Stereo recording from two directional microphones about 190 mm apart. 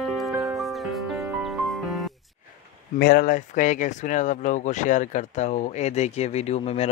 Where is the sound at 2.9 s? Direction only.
55° left (ahead or behind).